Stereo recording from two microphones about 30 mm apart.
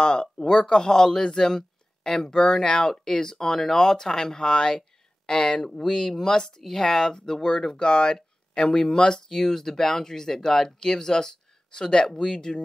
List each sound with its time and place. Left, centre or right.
0.0 s speech: left
6.6 s speech: centre
7.8 s speech: left
9.3 s speech: centre